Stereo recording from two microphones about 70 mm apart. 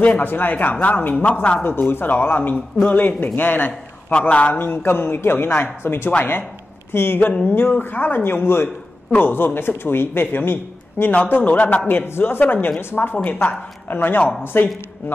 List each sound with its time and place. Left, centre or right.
0.0 s a man's voice: left